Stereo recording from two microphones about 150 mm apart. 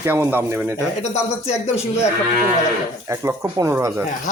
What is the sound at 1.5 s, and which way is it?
Speech, 45° left (ahead or behind).